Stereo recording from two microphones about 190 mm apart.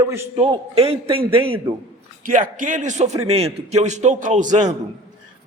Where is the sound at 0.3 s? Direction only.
30° right (ahead or behind).